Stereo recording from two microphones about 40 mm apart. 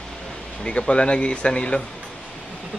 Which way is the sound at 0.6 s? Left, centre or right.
Left.